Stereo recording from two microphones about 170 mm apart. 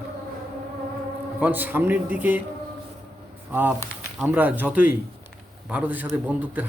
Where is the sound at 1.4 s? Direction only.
10° right (ahead or behind).